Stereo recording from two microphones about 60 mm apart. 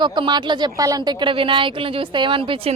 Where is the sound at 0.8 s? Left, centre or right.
Right.